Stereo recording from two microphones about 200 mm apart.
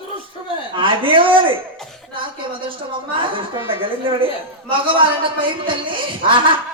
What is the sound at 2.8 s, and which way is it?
Speech, 25° right (ahead or behind).